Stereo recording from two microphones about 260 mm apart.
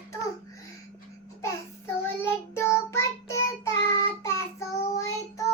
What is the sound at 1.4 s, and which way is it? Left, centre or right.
Child singing, centre.